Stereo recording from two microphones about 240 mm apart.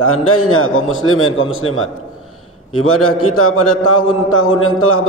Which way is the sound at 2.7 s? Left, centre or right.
Left.